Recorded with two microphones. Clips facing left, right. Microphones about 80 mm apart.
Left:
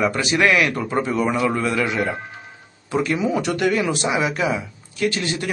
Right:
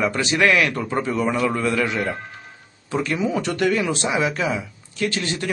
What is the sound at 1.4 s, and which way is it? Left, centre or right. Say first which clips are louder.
A man's voice: even; centre.